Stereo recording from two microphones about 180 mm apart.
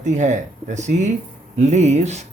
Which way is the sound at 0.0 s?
40° right (ahead or behind).